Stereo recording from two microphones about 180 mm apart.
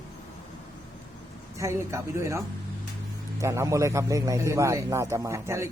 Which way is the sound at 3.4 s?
15° right (ahead or behind).